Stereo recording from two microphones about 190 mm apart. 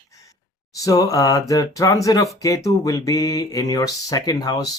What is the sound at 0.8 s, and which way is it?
Speech, 20° left (ahead or behind).